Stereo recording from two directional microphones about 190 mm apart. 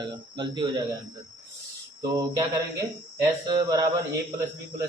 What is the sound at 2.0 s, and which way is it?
A man's voice, 20° right (ahead or behind).